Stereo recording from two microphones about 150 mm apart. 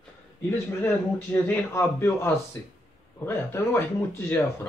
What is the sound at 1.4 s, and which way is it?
Speech, 15° left (ahead or behind).